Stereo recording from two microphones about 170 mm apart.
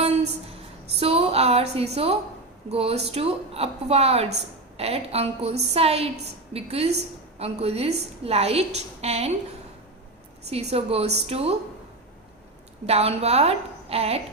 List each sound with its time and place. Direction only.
0.0 s a sound: 35° right (ahead or behind)
0.9 s a woman's voice: 35° right (ahead or behind)
10.5 s a woman's voice: 35° right (ahead or behind)
12.8 s a woman's voice: 35° right (ahead or behind)